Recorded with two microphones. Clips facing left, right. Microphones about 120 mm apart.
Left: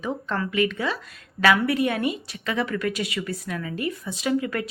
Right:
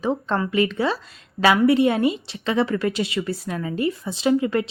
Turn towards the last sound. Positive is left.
turn(degrees=-25)  # may be behind; listen again after turning